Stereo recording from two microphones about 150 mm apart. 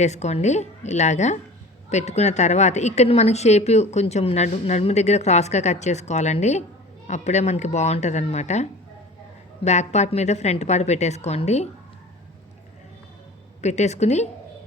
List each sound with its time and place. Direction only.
0.0 s a woman's voice: 50° left (ahead or behind)
9.6 s a woman's voice: 50° left (ahead or behind)
13.6 s a woman's voice: 50° left (ahead or behind)